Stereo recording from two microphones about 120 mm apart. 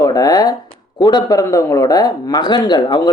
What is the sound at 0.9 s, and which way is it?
Speech, 35° left (ahead or behind).